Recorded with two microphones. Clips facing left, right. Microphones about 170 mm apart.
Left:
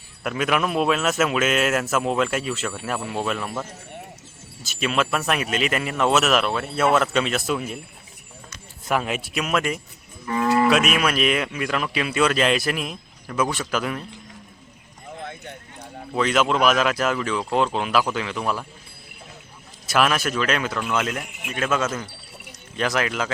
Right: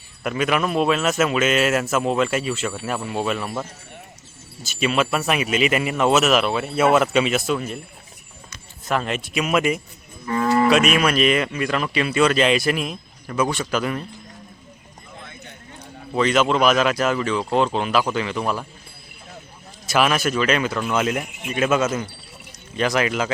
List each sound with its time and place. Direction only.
0.2 s cattle: centre (ahead or behind)
8.9 s cattle: 5° left (ahead or behind)
10.2 s cattle: 5° left (ahead or behind)
16.1 s cattle: centre (ahead or behind)
19.9 s cattle: centre (ahead or behind)
21.5 s speech: 10° right (ahead or behind)
22.7 s cattle: centre (ahead or behind)